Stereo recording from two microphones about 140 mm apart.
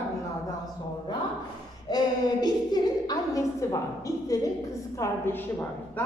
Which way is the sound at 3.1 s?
25° left (ahead or behind).